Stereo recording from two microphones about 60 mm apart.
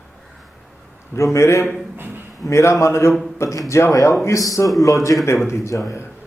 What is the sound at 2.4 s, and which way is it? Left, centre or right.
Speech, left.